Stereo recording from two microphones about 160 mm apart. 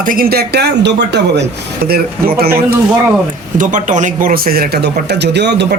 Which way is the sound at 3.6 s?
55° right (ahead or behind).